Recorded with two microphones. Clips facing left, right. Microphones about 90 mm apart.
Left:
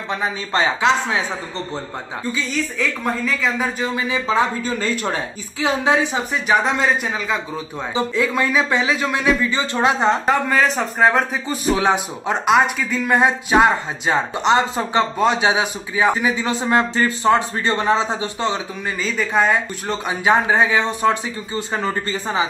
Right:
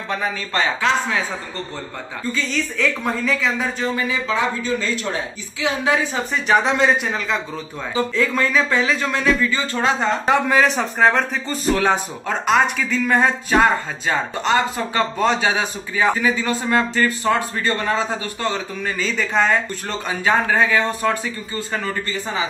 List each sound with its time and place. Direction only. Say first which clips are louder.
0.1 s a man's voice: left 1 dB; 20° left (ahead or behind)
2.3 s a woman's voice: even; 5° left (ahead or behind)
3.9 s a man's voice: left 1 dB; 20° left (ahead or behind)
4.4 s speech: left 2 dB; 45° left (ahead or behind)
6.5 s a woman's voice: right 1 dB; centre (ahead or behind)
7.9 s a man's voice: even; 15° left (ahead or behind)
10.2 s a man's voice: right 1 dB; centre (ahead or behind); by 18.6 s 20° left (ahead or behind)
18.9 s a man's voice: left 1 dB; centre (ahead or behind); by 22.5 s 25° left (ahead or behind)